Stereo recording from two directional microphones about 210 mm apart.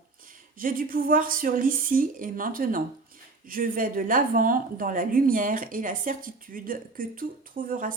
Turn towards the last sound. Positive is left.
turn(degrees=-40)  # may be behind; listen again after turning